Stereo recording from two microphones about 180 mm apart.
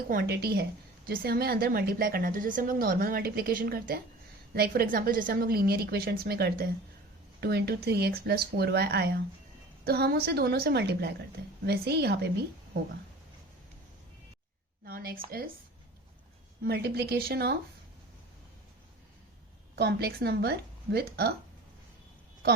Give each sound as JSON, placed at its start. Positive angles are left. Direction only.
{"t": 0.1, "sound": "a woman's voice", "side_deg": -55}
{"t": 14.8, "sound": "a woman's voice", "side_deg": -55}
{"t": 16.6, "sound": "a woman's voice", "side_deg": -60}
{"t": 19.7, "sound": "a woman's voice", "side_deg": -65}